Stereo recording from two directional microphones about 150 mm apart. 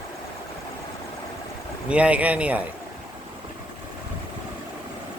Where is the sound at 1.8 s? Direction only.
10° right (ahead or behind).